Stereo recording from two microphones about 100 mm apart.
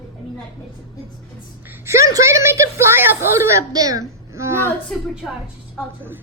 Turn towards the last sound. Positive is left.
turn(degrees=-25)  # may be behind; listen again after turning